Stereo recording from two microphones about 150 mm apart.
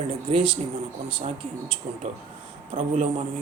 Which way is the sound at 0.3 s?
35° right (ahead or behind).